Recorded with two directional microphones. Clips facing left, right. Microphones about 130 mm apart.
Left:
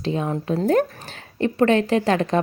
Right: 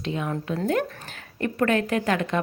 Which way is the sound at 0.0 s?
30° left (ahead or behind).